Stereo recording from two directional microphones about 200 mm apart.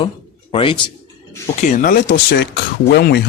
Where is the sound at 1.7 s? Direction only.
40° left (ahead or behind).